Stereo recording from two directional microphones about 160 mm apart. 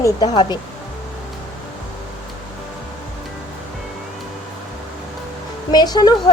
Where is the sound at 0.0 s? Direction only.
25° left (ahead or behind).